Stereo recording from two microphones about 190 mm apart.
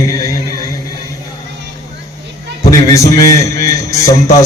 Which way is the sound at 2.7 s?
15° left (ahead or behind).